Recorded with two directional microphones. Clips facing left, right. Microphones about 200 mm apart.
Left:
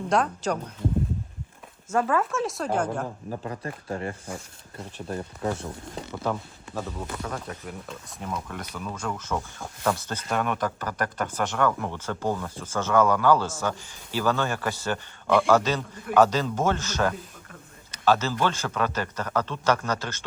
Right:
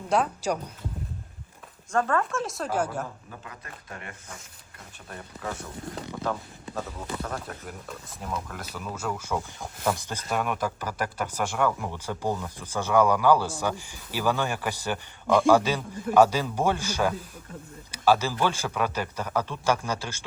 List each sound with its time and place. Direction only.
0.1 s speech: 5° right (ahead or behind)
1.9 s a woman's voice: 5° left (ahead or behind)
3.2 s speech: 35° left (ahead or behind)
6.7 s speech: centre (ahead or behind)